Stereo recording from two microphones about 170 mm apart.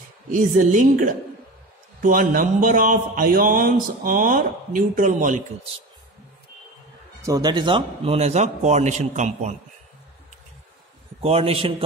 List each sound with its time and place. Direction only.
0.3 s a man's voice: 50° right (ahead or behind)
7.2 s a man's voice: 20° right (ahead or behind); by 9.6 s 45° right (ahead or behind)
11.2 s a man's voice: 35° right (ahead or behind)